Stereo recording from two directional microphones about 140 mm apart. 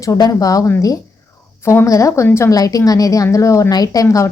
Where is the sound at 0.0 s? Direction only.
25° left (ahead or behind).